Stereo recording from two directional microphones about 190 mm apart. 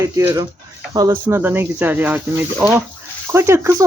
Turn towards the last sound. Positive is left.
turn(degrees=-15)  # may be behind; listen again after turning